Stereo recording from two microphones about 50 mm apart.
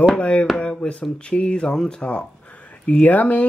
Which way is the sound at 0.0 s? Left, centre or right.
Left.